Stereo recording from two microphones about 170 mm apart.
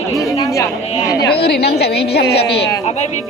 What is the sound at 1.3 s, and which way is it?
Speech, 70° left (ahead or behind).